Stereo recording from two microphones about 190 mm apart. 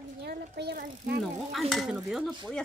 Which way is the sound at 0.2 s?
60° right (ahead or behind).